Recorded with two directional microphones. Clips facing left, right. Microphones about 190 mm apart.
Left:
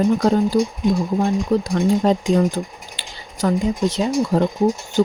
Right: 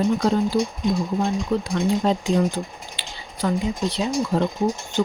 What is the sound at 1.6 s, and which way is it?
Speech, 45° left (ahead or behind).